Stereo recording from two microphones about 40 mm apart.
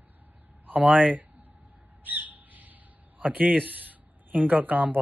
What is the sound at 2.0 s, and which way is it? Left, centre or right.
Bird, right.